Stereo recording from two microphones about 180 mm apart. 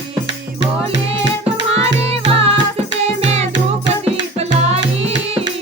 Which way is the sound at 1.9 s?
35° right (ahead or behind).